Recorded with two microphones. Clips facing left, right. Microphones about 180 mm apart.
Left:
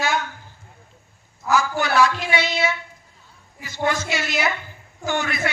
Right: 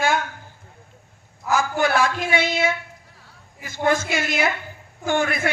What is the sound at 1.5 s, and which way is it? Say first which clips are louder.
A woman's voice: right 1 dB; 50° right (ahead or behind).